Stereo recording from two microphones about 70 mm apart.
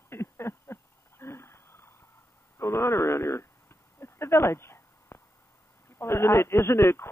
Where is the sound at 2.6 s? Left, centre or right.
Left.